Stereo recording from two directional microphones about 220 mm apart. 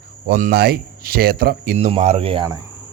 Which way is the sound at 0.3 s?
40° right (ahead or behind).